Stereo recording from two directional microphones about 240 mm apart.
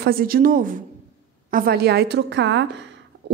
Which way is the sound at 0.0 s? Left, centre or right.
Right.